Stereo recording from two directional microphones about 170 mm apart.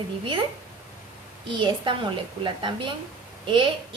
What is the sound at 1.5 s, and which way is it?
A woman's voice, 30° right (ahead or behind).